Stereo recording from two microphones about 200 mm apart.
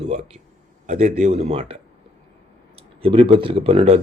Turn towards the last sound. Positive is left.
turn(degrees=-30)  # may be behind; listen again after turning